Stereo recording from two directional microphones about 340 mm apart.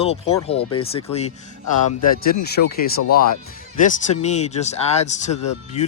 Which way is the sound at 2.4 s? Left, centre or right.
Left.